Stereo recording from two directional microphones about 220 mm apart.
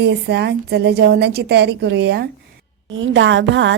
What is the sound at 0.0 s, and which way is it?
A woman's voice, 50° right (ahead or behind).